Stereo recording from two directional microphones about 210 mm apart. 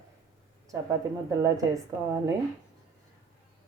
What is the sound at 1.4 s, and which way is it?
Speech, 15° right (ahead or behind).